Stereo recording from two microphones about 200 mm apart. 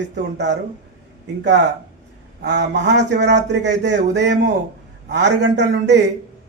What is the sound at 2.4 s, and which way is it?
A man's voice, 60° right (ahead or behind).